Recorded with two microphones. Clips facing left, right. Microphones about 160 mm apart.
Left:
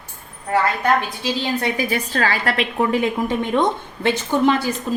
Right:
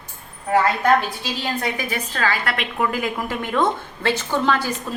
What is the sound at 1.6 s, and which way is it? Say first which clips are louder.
A woman's voice: left 4 dB; 35° left (ahead or behind).